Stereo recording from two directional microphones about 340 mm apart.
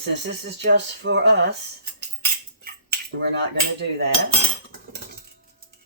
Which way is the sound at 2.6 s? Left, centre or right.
Right.